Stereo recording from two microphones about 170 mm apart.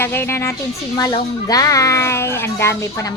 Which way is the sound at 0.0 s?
15° left (ahead or behind).